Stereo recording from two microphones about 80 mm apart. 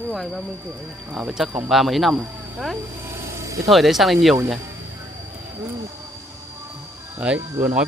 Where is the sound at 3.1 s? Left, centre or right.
Right.